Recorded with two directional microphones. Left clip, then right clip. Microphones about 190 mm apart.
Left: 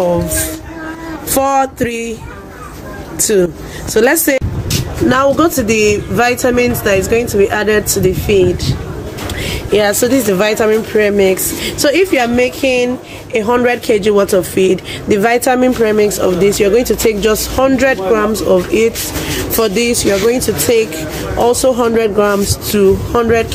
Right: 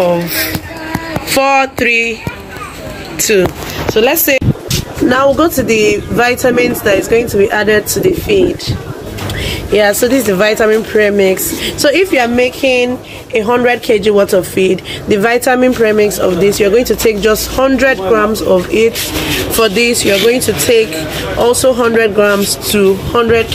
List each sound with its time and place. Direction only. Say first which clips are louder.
1.3 s speech: right 2 dB; 25° left (ahead or behind)
3.2 s speech: right 2 dB; 25° left (ahead or behind)
4.0 s a sound: even; 25° left (ahead or behind)
5.1 s speech: right 1 dB; 10° left (ahead or behind)
9.7 s speech: right 2 dB; 10° left (ahead or behind)